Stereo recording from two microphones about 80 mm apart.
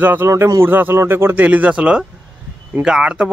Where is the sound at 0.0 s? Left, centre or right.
Right.